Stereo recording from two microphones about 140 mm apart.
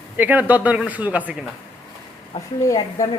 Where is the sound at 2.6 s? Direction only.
20° left (ahead or behind).